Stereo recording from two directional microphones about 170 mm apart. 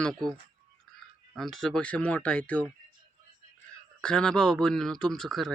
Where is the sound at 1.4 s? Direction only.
Centre (ahead or behind).